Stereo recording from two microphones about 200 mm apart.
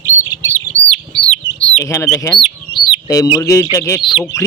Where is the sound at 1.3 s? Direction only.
Centre (ahead or behind).